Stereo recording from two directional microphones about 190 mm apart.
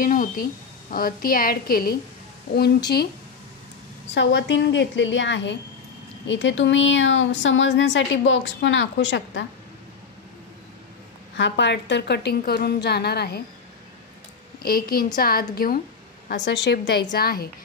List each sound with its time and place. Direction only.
0.0 s a woman's voice: 45° left (ahead or behind)
4.1 s a woman's voice: 70° left (ahead or behind)
11.3 s a woman's voice: 70° left (ahead or behind)
14.6 s a woman's voice: 50° left (ahead or behind)
16.4 s a woman's voice: 70° left (ahead or behind)
17.1 s a woman's voice: 55° left (ahead or behind)